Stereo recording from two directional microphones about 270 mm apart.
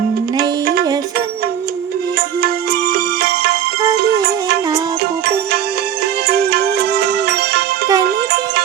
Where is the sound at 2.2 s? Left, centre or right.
Right.